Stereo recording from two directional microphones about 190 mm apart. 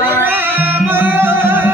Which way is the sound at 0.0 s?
10° right (ahead or behind).